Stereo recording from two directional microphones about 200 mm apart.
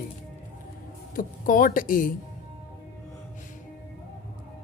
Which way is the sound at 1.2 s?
45° left (ahead or behind).